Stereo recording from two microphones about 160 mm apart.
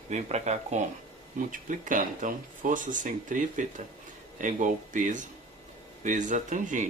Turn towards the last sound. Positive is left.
turn(degrees=-50)  # may be behind; listen again after turning